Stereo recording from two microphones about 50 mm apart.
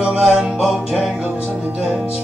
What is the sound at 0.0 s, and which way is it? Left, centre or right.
Music, centre.